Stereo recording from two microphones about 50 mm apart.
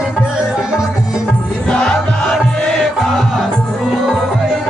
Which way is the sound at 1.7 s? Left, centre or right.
Centre.